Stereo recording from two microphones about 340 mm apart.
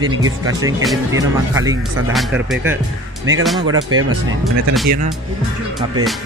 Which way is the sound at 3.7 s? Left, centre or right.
Right.